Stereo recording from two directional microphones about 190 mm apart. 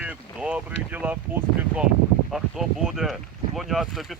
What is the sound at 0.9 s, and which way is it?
Speech, 10° right (ahead or behind).